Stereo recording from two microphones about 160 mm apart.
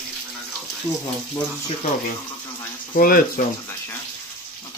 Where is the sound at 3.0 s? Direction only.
65° left (ahead or behind).